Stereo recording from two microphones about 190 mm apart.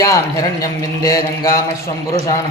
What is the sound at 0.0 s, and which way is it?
Speech, 20° left (ahead or behind).